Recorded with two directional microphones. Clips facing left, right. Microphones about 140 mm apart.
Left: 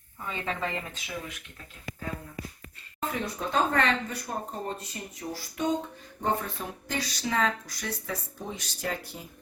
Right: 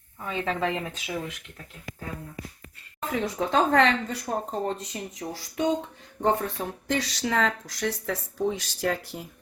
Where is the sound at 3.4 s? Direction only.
90° right.